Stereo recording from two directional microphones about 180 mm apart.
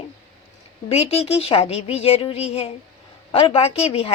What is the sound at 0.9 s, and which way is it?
A woman's voice, 35° left (ahead or behind).